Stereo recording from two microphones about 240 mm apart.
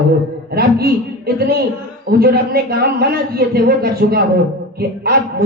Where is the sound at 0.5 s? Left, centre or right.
Right.